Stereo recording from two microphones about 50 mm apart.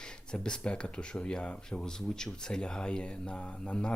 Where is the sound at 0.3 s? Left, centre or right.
Centre.